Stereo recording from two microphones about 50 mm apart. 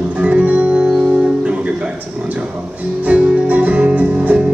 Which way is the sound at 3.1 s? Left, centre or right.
Centre.